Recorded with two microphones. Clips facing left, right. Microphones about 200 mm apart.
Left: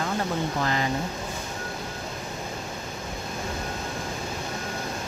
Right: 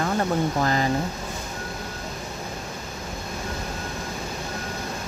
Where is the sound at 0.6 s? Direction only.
40° right (ahead or behind).